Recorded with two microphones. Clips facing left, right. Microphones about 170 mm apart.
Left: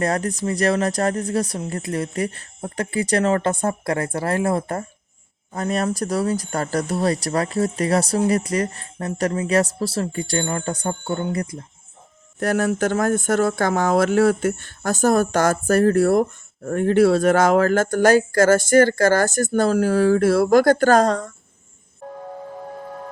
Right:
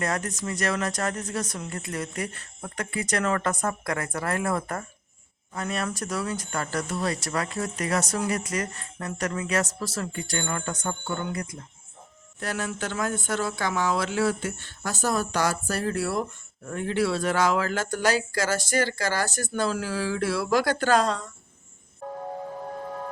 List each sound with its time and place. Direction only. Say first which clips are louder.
0.0 s speech: left 7 dB; 35° left (ahead or behind)
12.4 s speech: left 11 dB; 45° left (ahead or behind)